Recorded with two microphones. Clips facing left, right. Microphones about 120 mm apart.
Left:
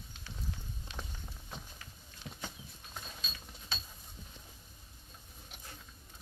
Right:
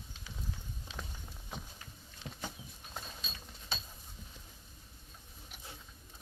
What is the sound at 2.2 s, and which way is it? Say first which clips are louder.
Patter: right 1 dB; 55° right (ahead or behind).